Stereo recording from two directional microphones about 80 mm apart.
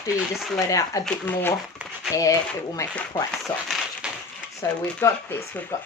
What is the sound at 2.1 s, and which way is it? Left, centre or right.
Speech, left.